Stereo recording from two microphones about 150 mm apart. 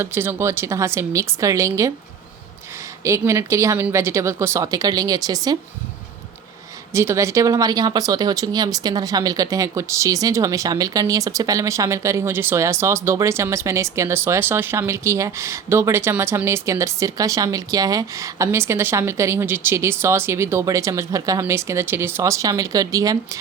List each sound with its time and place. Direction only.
0.0 s speech: 15° right (ahead or behind)
3.0 s speech: 20° right (ahead or behind)
6.9 s speech: 20° right (ahead or behind)